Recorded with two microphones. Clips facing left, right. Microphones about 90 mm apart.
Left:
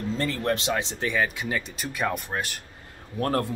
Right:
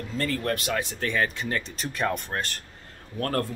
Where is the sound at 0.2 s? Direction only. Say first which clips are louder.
Right 1 dB; 25° left (ahead or behind).